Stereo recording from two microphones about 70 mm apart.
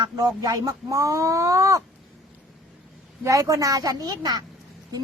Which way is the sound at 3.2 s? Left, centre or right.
Right.